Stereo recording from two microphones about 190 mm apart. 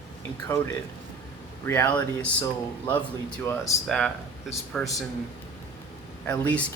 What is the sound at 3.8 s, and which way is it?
Speech, 5° left (ahead or behind).